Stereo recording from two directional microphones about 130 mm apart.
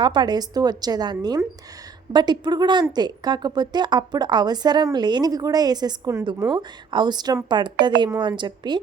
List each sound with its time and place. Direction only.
0.0 s a woman's voice: 35° right (ahead or behind)